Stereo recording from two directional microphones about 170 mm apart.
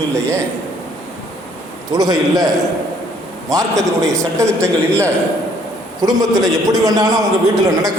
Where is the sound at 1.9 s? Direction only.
25° right (ahead or behind).